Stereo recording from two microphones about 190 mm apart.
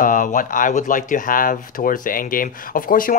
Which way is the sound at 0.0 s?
45° left (ahead or behind).